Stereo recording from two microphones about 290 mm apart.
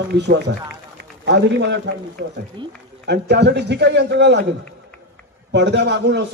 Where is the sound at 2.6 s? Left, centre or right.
Centre.